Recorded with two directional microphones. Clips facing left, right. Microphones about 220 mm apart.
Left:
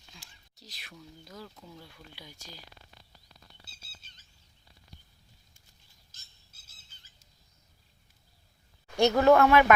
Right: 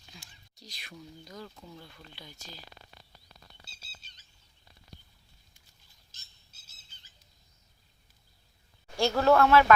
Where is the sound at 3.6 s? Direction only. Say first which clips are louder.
Right 1 dB; 50° left (ahead or behind).